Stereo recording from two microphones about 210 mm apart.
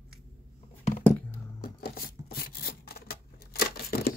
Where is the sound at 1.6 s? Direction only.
45° left (ahead or behind).